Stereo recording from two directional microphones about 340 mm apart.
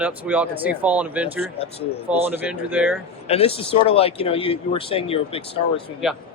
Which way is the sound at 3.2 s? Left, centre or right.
Centre.